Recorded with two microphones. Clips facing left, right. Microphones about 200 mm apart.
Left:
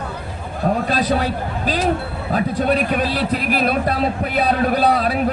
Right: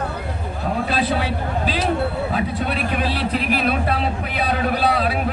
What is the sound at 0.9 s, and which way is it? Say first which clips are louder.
A man's voice: left 2 dB; 45° left (ahead or behind).